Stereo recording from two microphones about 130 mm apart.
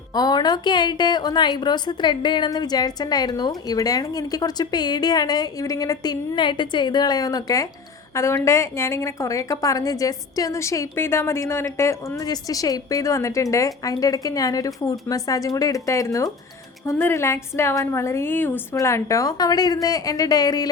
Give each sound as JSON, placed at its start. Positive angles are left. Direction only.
{"t": 0.1, "sound": "a woman's voice", "side_deg": 30}